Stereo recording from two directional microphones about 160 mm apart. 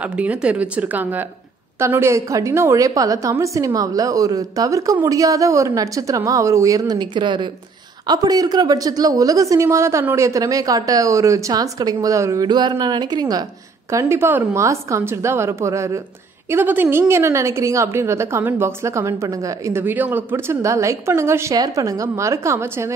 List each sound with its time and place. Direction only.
0.0 s a woman's voice: 10° right (ahead or behind)